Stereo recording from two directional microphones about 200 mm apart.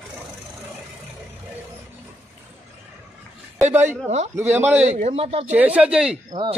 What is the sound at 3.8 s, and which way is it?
Speech, 35° right (ahead or behind).